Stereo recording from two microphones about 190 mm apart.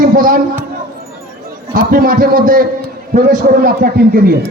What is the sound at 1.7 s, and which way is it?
A man's voice, 50° right (ahead or behind).